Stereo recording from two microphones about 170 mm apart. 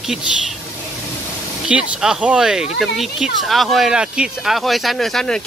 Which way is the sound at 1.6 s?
5° right (ahead or behind).